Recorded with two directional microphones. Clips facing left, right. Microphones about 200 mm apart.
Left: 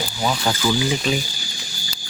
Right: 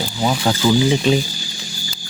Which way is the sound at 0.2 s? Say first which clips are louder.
Right 4 dB; 20° right (ahead or behind).